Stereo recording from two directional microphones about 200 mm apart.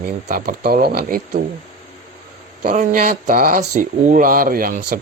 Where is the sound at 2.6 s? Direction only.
45° right (ahead or behind).